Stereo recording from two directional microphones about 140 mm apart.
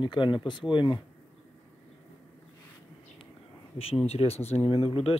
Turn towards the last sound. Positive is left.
turn(degrees=40)  # may be behind; listen again after turning